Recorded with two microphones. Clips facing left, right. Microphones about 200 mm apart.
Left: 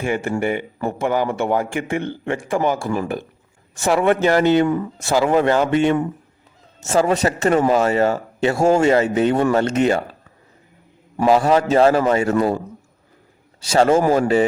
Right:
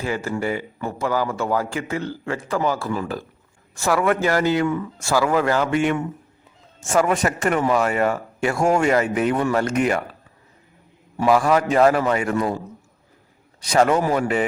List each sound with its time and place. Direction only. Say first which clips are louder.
0.0 s speech: left 3 dB; 20° left (ahead or behind)
4.6 s speech: left 3 dB; 35° left (ahead or behind)
4.9 s speech: left 3 dB; 20° left (ahead or behind)
11.3 s speech: left 2 dB; 25° left (ahead or behind)
13.7 s speech: left 3 dB; 30° left (ahead or behind)